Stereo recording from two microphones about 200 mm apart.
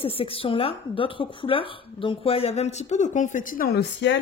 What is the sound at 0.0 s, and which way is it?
A woman's voice, 30° left (ahead or behind).